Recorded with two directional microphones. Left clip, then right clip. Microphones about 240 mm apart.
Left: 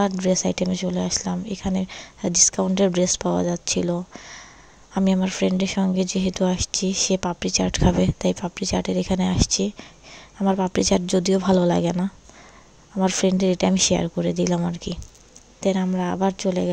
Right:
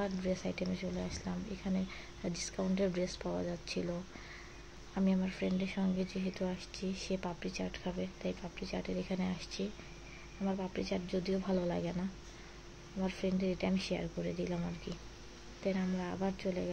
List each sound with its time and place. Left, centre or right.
0.0 s speech: left